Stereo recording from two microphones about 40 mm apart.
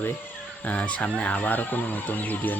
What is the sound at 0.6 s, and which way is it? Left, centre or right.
Speech, left.